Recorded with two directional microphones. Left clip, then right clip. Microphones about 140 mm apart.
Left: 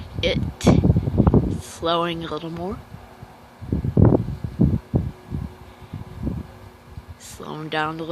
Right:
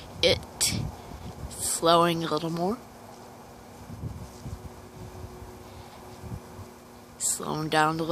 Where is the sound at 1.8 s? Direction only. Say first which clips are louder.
Right 1 dB; 5° right (ahead or behind).